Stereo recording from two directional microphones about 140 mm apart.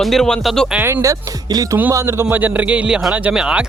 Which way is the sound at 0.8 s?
20° right (ahead or behind).